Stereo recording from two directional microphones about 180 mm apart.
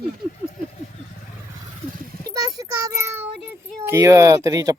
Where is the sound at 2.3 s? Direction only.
20° right (ahead or behind).